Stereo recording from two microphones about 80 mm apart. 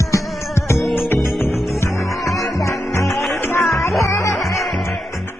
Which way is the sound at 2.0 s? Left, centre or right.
Centre.